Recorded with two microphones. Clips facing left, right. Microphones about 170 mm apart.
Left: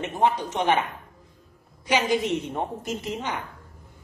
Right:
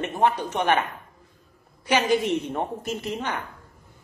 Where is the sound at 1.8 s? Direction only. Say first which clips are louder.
Right 1 dB; 15° left (ahead or behind).